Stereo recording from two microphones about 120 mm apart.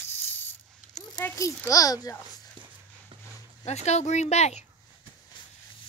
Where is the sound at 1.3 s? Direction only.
25° left (ahead or behind).